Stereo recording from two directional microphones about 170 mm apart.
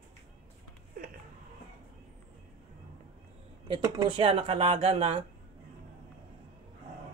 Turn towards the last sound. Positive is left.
turn(degrees=-35)  # may be behind; listen again after turning